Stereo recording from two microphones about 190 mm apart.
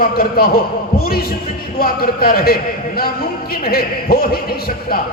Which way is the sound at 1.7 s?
50° left (ahead or behind).